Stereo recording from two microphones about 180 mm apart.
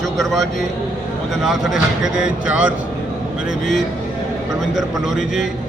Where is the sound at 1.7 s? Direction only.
5° right (ahead or behind).